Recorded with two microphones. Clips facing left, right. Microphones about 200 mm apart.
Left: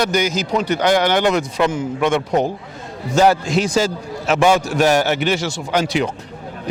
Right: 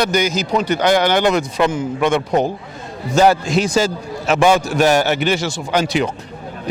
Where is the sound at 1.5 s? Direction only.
35° right (ahead or behind).